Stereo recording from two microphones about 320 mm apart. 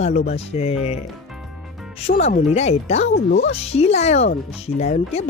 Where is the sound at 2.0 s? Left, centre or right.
Left.